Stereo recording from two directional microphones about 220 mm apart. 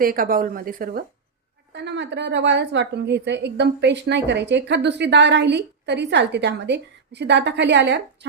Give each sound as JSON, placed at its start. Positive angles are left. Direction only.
{"t": 0.0, "sound": "a woman's voice", "side_deg": -40}
{"t": 1.7, "sound": "a woman's voice", "side_deg": -50}